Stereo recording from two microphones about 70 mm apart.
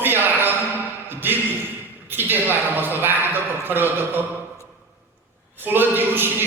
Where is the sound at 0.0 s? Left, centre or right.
Right.